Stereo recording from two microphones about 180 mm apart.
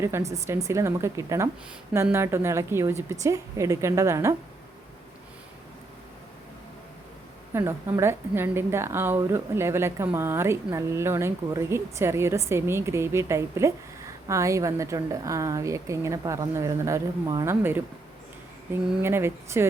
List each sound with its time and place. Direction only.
0.0 s speech: 15° right (ahead or behind)
7.5 s speech: 15° right (ahead or behind)